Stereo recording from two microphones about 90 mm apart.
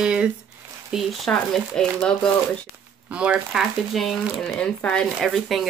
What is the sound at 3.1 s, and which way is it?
Speech, 10° right (ahead or behind).